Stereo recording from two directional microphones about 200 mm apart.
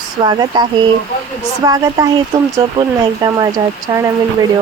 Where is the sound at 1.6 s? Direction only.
20° right (ahead or behind).